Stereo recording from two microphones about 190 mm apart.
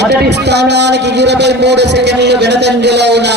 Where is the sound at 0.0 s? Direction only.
60° right (ahead or behind).